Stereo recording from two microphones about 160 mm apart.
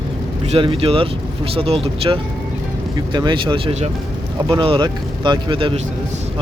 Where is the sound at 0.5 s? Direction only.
35° right (ahead or behind).